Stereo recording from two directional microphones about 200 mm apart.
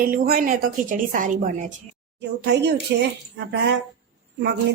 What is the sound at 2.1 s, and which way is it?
Speech, 60° right (ahead or behind).